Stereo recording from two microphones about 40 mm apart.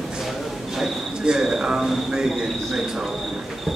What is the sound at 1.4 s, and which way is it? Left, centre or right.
Speech, centre.